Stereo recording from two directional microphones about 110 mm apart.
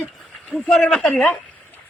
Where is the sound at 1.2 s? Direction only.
15° left (ahead or behind).